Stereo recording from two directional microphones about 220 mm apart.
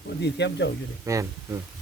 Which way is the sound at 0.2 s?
50° left (ahead or behind).